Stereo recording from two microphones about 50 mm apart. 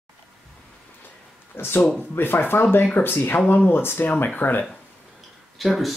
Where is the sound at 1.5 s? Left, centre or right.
Left.